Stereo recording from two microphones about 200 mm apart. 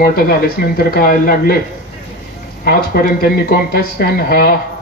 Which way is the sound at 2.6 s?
50° left (ahead or behind).